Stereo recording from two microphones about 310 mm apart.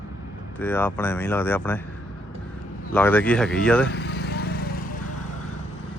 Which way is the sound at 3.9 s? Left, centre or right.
Left.